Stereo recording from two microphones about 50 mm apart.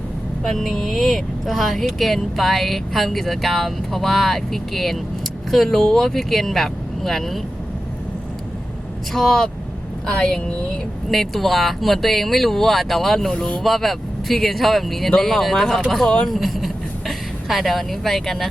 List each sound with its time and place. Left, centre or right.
0.4 s speech: centre
9.1 s speech: centre
11.1 s speech: centre
13.3 s speech: centre
13.6 s speech: centre